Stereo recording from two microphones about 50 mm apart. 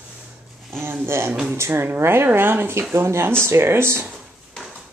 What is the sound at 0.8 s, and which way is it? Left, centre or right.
Speech, right.